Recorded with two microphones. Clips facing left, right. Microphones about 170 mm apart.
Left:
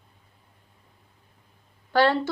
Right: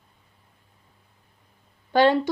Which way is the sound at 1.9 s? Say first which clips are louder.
Right 3 dB; 20° right (ahead or behind).